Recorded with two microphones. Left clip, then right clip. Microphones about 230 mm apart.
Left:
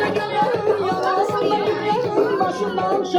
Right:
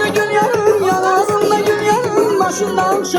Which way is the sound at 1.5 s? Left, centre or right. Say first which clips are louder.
Right 6 dB; right.